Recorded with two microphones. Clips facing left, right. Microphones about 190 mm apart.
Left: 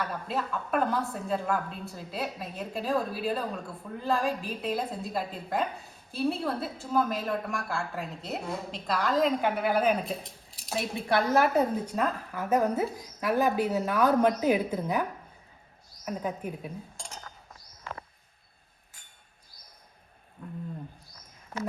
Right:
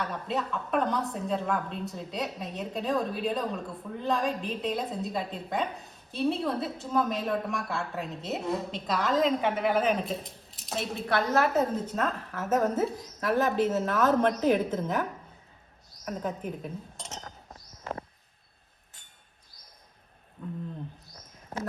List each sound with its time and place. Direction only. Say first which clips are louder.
0.0 s a woman's voice: right 1 dB; centre (ahead or behind)
10.9 s a woman's voice: left 1 dB; 10° left (ahead or behind)
16.0 s a woman's voice: even; 5° left (ahead or behind)
17.2 s chink: right 3 dB; 30° right (ahead or behind)